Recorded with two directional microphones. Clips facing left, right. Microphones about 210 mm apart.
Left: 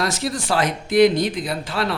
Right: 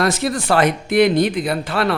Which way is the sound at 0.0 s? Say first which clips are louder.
Right 5 dB; 60° right (ahead or behind).